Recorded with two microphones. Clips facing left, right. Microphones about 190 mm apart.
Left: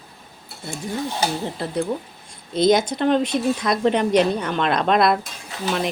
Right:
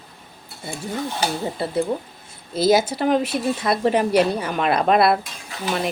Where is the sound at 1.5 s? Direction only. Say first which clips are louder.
Right 2 dB; 5° right (ahead or behind).